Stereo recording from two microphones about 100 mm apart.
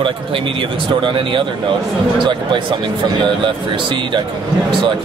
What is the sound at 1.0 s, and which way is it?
Speech, 60° right (ahead or behind).